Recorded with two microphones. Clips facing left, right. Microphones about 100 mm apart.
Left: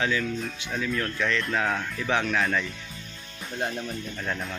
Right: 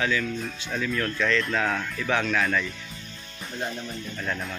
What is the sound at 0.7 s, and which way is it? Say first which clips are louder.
Speech: right 1 dB; 10° left (ahead or behind).